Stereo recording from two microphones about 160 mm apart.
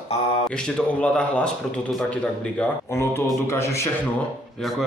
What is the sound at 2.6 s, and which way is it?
A man's voice, 15° left (ahead or behind).